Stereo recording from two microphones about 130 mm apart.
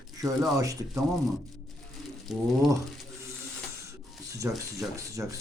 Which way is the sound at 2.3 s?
Centre (ahead or behind).